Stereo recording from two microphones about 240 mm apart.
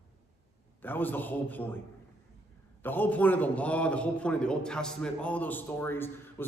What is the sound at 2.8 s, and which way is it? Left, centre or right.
A man's voice, centre.